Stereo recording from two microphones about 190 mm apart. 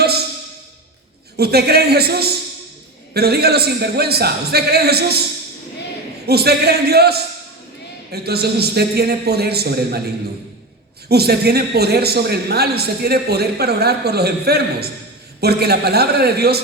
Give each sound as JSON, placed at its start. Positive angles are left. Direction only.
{"t": 1.4, "sound": "a man's voice", "side_deg": -55}
{"t": 6.2, "sound": "a man's voice", "side_deg": -55}
{"t": 11.1, "sound": "a man's voice", "side_deg": -55}